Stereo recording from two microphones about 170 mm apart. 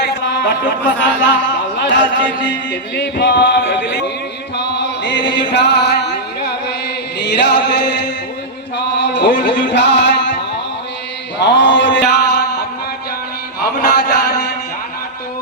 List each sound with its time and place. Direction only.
0.0 s a sound: 90° left
1.8 s music: 90° left
4.5 s chant: 90° left
5.4 s music: 90° left
7.2 s music: 90° left
9.1 s music: 90° left
11.3 s mantra: 90° left
13.6 s a sound: 70° left (ahead or behind)